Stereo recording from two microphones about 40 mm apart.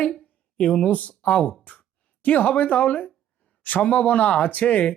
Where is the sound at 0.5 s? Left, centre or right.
Left.